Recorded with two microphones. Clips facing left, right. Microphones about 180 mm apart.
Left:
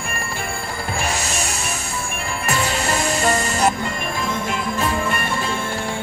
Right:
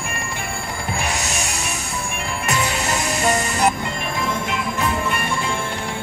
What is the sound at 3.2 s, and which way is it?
Music, 20° right (ahead or behind).